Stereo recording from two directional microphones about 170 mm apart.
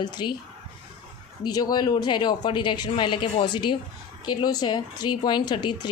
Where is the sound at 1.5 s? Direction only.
25° left (ahead or behind).